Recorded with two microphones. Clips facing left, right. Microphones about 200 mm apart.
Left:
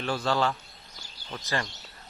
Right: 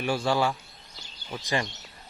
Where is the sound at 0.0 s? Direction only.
10° right (ahead or behind).